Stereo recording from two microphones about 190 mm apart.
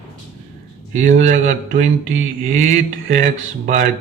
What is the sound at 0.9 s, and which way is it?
A man's voice, 40° right (ahead or behind).